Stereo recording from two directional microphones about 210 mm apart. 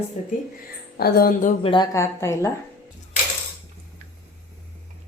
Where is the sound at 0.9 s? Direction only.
40° left (ahead or behind).